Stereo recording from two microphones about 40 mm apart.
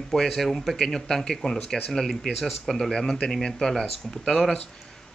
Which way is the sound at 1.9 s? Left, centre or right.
Centre.